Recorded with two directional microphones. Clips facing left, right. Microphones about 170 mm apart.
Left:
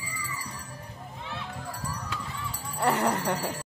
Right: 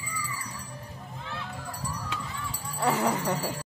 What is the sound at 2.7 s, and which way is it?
Speech, centre (ahead or behind).